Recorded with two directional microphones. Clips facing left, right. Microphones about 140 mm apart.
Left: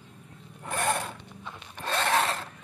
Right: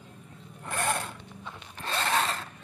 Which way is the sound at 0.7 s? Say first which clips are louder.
Left 2 dB; 15° left (ahead or behind).